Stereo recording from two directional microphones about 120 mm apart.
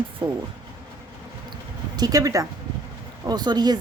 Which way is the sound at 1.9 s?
30° right (ahead or behind).